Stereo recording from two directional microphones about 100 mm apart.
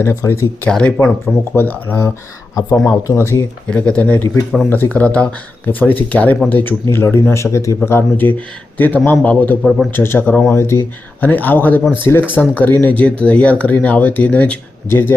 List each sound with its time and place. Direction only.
0.0 s speech: 30° left (ahead or behind)
0.7 s speech: 10° left (ahead or behind)
1.2 s speech: 20° left (ahead or behind)
2.7 s a man's voice: centre (ahead or behind)
3.0 s speech: 30° left (ahead or behind)
3.7 s speech: 15° left (ahead or behind)
9.6 s a man's voice: centre (ahead or behind)
9.9 s speech: 25° left (ahead or behind)